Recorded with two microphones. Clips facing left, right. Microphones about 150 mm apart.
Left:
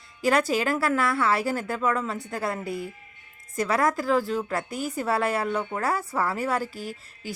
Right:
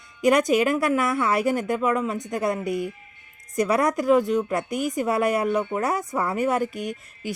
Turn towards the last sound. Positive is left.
turn(degrees=-20)  # may be behind; listen again after turning